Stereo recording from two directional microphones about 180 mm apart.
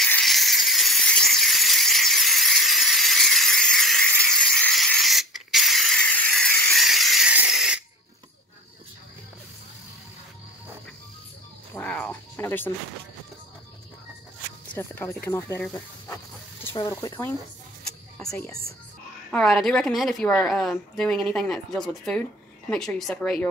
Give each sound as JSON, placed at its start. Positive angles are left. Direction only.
{"t": 0.0, "sound": "a sound", "side_deg": 0}
{"t": 11.7, "sound": "cat", "side_deg": 10}
{"t": 14.7, "sound": "speech", "side_deg": 10}
{"t": 18.3, "sound": "speech", "side_deg": 15}
{"t": 19.3, "sound": "a woman's voice", "side_deg": 5}